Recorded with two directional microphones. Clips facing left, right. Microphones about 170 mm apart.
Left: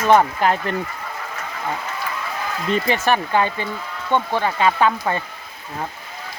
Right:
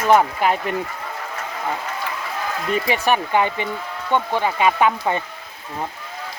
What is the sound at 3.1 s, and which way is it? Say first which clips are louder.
Speech: right 1 dB; 15° right (ahead or behind).